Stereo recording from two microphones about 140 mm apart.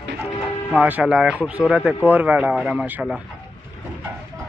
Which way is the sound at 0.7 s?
10° right (ahead or behind).